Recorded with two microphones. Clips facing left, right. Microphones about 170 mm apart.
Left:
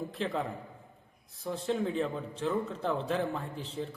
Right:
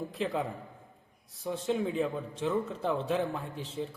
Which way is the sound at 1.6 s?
5° right (ahead or behind).